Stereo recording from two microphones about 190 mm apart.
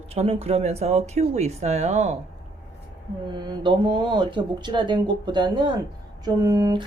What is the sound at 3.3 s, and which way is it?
Speech, 25° right (ahead or behind).